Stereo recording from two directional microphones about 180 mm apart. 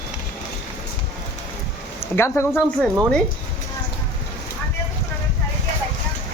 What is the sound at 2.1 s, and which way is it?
Speech, 15° left (ahead or behind).